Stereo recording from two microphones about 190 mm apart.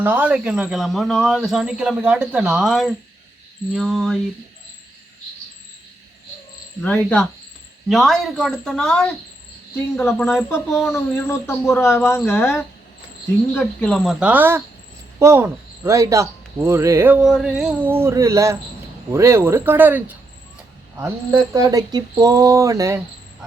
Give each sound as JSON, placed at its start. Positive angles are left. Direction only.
{"t": 0.0, "sound": "speech", "side_deg": -10}
{"t": 6.8, "sound": "speech", "side_deg": 5}
{"t": 10.9, "sound": "speech", "side_deg": 15}